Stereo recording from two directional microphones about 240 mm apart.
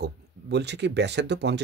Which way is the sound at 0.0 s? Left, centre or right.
Right.